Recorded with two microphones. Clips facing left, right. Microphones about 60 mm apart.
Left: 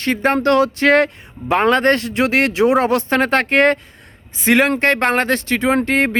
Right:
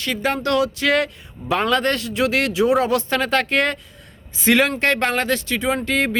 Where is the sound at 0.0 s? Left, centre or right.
Left.